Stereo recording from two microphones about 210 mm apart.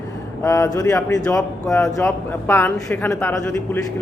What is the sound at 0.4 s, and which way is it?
Speech, 15° left (ahead or behind).